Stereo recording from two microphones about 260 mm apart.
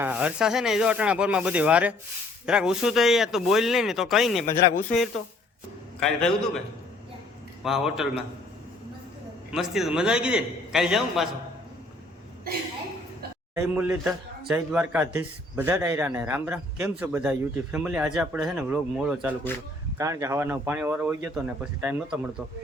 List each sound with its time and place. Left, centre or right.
0.0 s speech: centre
4.4 s speech: left
6.0 s speech: centre
7.6 s speech: centre
9.5 s speech: centre
13.6 s a man's voice: centre